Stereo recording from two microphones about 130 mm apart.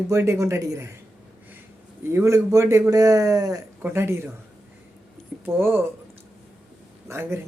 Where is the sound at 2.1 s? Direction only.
20° right (ahead or behind).